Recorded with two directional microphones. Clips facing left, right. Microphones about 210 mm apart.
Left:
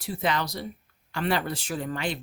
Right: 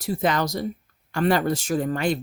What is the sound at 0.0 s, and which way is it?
Speech, 45° right (ahead or behind).